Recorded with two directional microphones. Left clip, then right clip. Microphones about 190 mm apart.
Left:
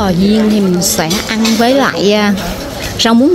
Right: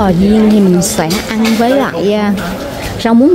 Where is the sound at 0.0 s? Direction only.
10° right (ahead or behind).